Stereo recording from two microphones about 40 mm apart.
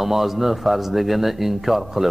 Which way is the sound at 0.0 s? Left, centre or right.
Centre.